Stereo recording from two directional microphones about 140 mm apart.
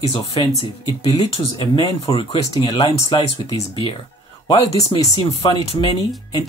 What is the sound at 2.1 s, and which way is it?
Speech, 40° left (ahead or behind).